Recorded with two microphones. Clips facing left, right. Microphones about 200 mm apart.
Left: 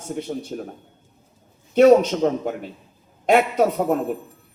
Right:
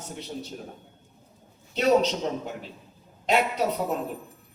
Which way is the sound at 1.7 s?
50° left (ahead or behind).